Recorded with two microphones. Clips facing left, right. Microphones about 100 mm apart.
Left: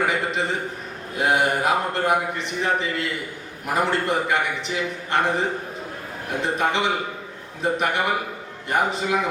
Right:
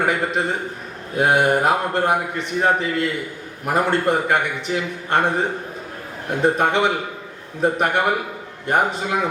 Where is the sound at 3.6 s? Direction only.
50° right (ahead or behind).